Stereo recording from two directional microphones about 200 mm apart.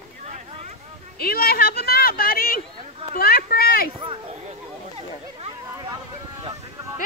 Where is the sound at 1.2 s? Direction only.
50° left (ahead or behind).